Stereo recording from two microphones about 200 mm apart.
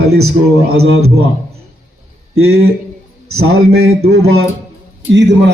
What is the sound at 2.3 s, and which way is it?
Speech, 90° right.